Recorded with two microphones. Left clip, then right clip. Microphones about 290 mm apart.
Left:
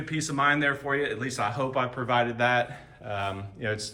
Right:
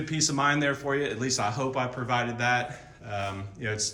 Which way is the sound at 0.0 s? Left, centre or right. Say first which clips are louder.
Even; centre.